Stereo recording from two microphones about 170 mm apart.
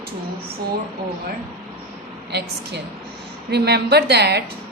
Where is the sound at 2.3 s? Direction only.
75° right (ahead or behind).